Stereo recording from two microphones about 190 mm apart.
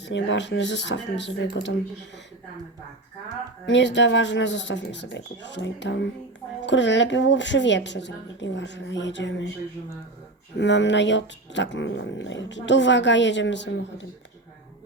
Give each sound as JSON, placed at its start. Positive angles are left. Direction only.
{"t": 0.0, "sound": "speech", "side_deg": 70}
{"t": 3.7, "sound": "speech", "side_deg": 70}
{"t": 10.6, "sound": "speech", "side_deg": 70}